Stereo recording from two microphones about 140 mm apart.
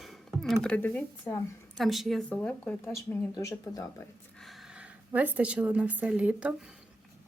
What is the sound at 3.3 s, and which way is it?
Speech, 25° left (ahead or behind).